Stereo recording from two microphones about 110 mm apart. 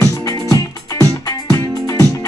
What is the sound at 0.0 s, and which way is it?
Music, 30° left (ahead or behind).